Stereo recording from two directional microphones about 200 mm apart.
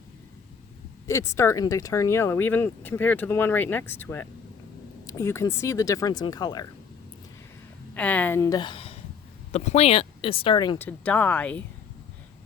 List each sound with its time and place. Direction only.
1.0 s speech: 15° left (ahead or behind)
7.9 s speech: 5° left (ahead or behind); by 10.8 s 25° left (ahead or behind)
10.8 s speech: 5° left (ahead or behind)